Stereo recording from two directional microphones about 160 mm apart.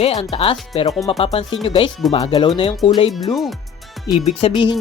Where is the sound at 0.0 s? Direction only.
35° left (ahead or behind).